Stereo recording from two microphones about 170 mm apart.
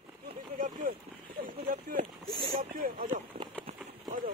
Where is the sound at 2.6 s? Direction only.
55° right (ahead or behind).